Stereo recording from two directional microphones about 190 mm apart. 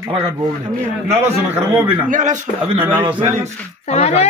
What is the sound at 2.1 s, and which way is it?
Speech, 40° right (ahead or behind).